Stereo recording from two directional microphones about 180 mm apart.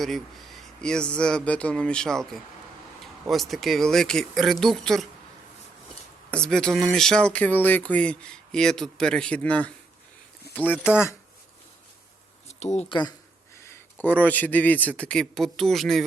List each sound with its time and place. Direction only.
0.0 s speech: centre (ahead or behind)
6.3 s speech: 5° left (ahead or behind)
10.8 s a man's voice: 10° left (ahead or behind)
12.5 s a sound: 40° left (ahead or behind)
12.9 s speech: 25° left (ahead or behind)
13.6 s a man's voice: 15° left (ahead or behind)